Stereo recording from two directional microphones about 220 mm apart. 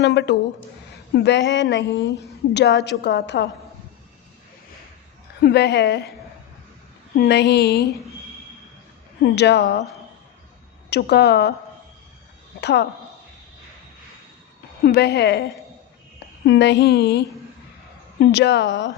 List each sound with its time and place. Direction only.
0.0 s a woman's voice: 50° left (ahead or behind)
5.4 s a woman's voice: 50° left (ahead or behind)
7.2 s a woman's voice: 50° left (ahead or behind)
9.2 s a woman's voice: 50° left (ahead or behind)
10.8 s a woman's voice: 50° left (ahead or behind)
12.5 s speech: 50° left (ahead or behind)
14.8 s a woman's voice: 50° left (ahead or behind)
16.5 s a woman's voice: 50° left (ahead or behind)